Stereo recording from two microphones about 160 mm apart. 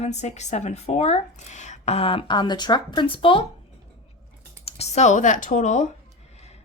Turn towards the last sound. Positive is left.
turn(degrees=50)  # may be behind; listen again after turning